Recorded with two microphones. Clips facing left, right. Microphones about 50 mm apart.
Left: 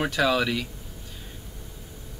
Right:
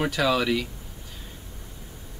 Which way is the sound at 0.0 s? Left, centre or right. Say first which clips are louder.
Even; centre.